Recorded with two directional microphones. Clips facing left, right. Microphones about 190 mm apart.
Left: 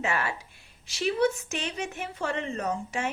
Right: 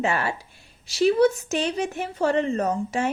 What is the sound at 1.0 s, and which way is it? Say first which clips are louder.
A woman's voice: right 7 dB; 40° right (ahead or behind).